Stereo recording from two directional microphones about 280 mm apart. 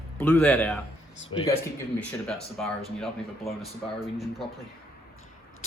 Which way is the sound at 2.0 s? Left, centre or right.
Centre.